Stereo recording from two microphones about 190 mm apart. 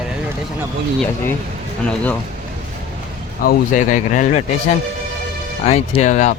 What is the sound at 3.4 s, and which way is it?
Speech, 40° left (ahead or behind).